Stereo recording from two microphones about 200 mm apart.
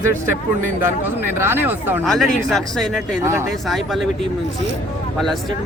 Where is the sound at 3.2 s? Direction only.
15° right (ahead or behind).